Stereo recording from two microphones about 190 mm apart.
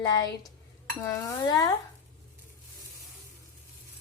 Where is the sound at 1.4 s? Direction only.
20° left (ahead or behind).